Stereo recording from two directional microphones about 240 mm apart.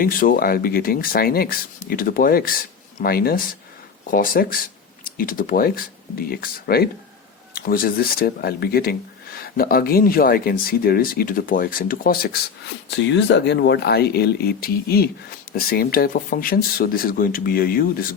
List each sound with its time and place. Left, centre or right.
0.0 s speech: left